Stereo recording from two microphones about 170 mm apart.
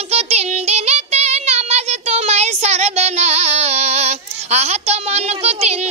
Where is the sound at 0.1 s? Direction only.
40° right (ahead or behind).